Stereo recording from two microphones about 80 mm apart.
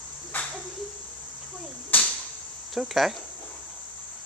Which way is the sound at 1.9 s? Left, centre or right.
Left.